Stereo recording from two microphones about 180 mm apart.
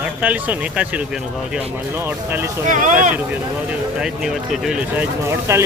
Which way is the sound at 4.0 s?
5° right (ahead or behind).